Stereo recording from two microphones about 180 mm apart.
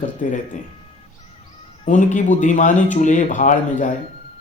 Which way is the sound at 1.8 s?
45° left (ahead or behind).